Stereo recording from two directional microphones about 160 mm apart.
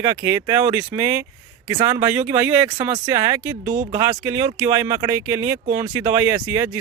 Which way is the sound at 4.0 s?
15° right (ahead or behind).